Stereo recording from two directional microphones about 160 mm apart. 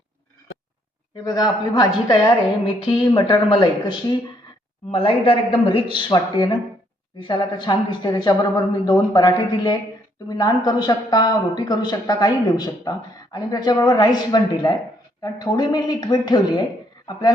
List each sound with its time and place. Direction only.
1.1 s speech: 25° left (ahead or behind)